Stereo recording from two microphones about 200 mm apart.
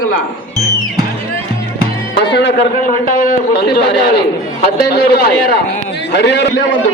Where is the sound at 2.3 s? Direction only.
60° left (ahead or behind).